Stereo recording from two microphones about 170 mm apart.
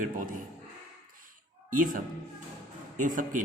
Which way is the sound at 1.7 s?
50° right (ahead or behind).